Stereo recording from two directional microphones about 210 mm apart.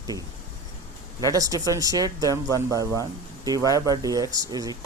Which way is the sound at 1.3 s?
15° right (ahead or behind).